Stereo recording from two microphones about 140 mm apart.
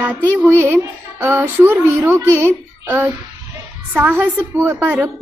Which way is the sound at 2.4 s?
15° right (ahead or behind).